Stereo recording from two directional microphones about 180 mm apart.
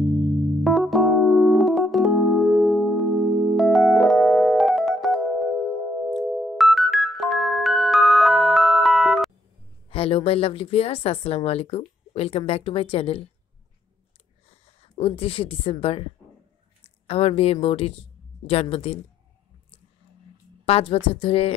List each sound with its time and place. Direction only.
0.7 s keyboard: centre (ahead or behind)
6.0 s music: centre (ahead or behind)
9.8 s a woman's voice: 30° left (ahead or behind)
14.5 s speech: 30° left (ahead or behind)
17.1 s a woman's voice: 30° left (ahead or behind)
20.6 s a woman's voice: 30° left (ahead or behind)